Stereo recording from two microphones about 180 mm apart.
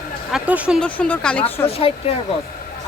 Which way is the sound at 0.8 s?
5° left (ahead or behind).